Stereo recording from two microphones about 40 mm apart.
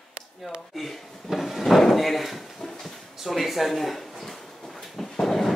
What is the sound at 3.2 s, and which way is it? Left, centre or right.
Speech, centre.